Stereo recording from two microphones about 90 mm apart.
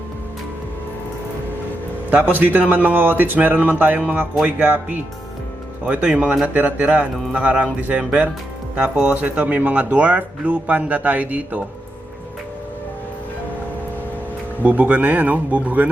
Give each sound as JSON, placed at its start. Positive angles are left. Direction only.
{"t": 2.0, "sound": "speech", "side_deg": -20}
{"t": 14.6, "sound": "speech", "side_deg": -20}